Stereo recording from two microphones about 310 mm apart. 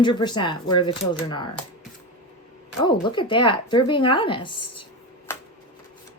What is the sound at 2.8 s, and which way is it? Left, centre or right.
Speech, centre.